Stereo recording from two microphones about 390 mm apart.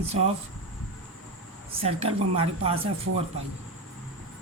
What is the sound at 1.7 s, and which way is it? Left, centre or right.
A woman's voice, centre.